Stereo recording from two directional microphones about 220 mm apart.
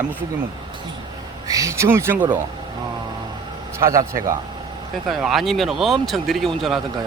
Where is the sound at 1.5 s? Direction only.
15° right (ahead or behind).